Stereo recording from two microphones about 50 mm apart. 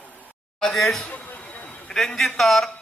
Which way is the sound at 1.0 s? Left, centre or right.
Left.